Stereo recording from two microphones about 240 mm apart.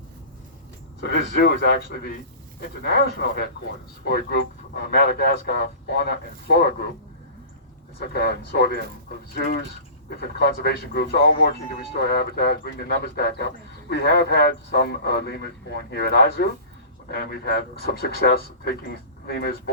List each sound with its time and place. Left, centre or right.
1.0 s speech: left
7.9 s speech: left